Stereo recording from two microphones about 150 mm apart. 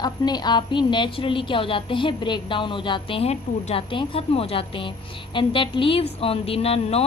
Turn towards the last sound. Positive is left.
turn(degrees=40)  # may be behind; listen again after turning